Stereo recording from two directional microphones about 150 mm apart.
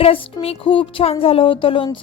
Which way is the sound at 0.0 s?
40° left (ahead or behind).